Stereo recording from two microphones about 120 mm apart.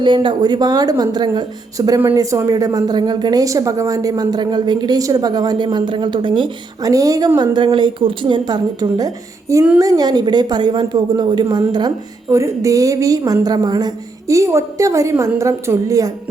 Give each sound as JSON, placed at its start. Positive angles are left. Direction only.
{"t": 0.0, "sound": "a woman's voice", "side_deg": -45}
{"t": 6.8, "sound": "a woman's voice", "side_deg": -30}
{"t": 12.3, "sound": "a woman's voice", "side_deg": -25}